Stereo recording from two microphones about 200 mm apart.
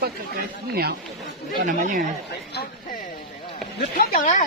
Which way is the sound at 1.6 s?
40° right (ahead or behind).